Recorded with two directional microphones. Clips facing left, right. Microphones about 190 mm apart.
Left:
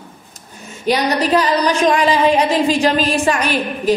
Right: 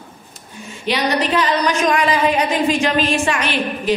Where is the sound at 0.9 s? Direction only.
40° left (ahead or behind).